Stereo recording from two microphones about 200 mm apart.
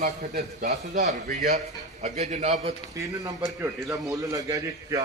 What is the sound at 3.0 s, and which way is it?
A man's voice, 15° right (ahead or behind).